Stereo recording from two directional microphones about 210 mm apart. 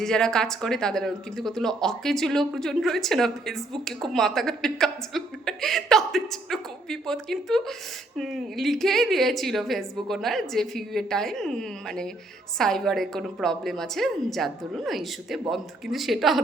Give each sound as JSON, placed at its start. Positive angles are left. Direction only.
{"t": 0.0, "sound": "speech", "side_deg": 5}